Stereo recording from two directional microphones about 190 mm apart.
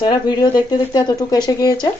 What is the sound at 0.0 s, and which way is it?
Speech, 20° left (ahead or behind).